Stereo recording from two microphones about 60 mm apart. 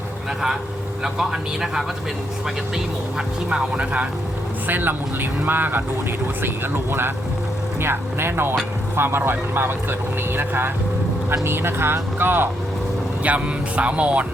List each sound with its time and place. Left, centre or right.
1.0 s speech: centre
3.8 s speech: right
4.6 s speech: right
13.2 s speech: right